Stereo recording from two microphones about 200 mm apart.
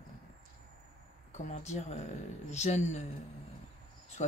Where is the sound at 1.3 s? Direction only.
35° left (ahead or behind).